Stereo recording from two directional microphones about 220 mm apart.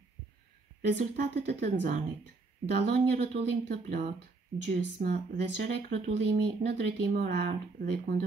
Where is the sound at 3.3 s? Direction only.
35° right (ahead or behind).